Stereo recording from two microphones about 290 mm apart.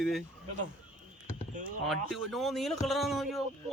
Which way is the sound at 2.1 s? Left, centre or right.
Centre.